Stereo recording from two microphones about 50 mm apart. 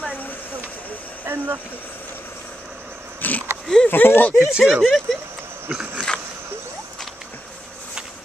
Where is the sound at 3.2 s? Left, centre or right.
Left.